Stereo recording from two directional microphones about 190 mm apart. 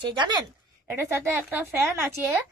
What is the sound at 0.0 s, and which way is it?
Speech, 25° right (ahead or behind).